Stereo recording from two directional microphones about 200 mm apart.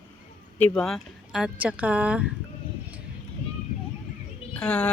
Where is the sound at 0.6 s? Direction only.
5° left (ahead or behind).